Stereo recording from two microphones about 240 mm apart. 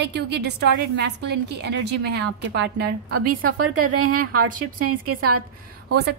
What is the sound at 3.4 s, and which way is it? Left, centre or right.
A woman's voice, right.